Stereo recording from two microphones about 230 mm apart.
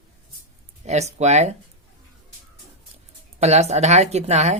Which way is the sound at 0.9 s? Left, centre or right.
Right.